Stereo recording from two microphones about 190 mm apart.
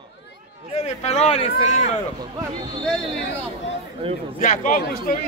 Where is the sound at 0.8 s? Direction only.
35° left (ahead or behind).